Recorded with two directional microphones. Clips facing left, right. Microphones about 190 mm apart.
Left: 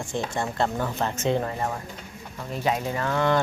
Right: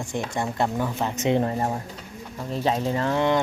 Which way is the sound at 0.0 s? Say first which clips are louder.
Right 1 dB; 15° right (ahead or behind).